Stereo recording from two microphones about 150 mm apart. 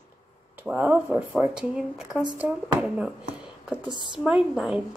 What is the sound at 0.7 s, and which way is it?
Speech, 10° right (ahead or behind).